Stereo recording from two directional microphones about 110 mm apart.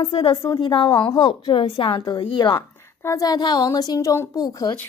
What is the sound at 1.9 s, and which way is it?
Speech, 35° left (ahead or behind).